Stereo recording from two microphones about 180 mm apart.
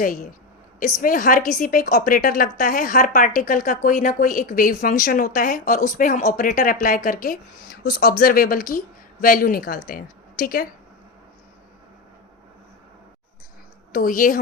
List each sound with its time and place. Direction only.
0.8 s a woman's voice: 50° left (ahead or behind)
13.9 s a woman's voice: 50° left (ahead or behind)